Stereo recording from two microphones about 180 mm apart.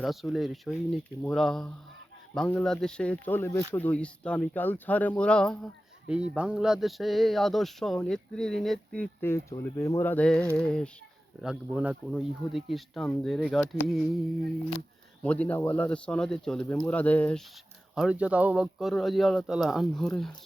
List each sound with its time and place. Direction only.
0.0 s speech: centre (ahead or behind)
6.1 s speech: 5° right (ahead or behind)
15.2 s speech: 10° left (ahead or behind)
17.9 s speech: 5° right (ahead or behind)